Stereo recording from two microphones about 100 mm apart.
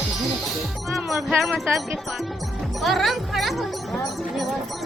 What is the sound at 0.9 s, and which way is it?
Speech, centre (ahead or behind).